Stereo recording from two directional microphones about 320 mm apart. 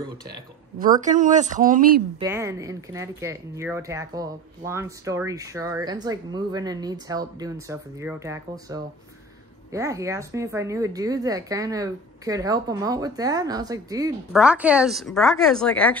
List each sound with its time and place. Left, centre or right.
1.0 s speech: right
2.1 s speech: centre